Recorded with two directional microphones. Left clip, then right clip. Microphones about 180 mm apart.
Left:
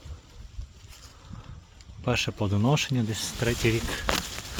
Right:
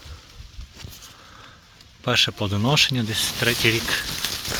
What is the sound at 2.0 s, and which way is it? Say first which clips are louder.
Speech: right 7 dB; 5° left (ahead or behind).